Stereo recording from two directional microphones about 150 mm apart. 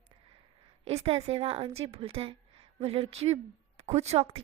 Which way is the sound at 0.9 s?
40° right (ahead or behind).